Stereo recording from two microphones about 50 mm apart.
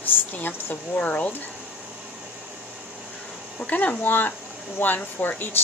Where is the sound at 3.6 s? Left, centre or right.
Left.